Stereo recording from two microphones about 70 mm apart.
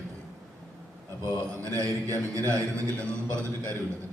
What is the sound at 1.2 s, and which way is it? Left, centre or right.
A man's voice, right.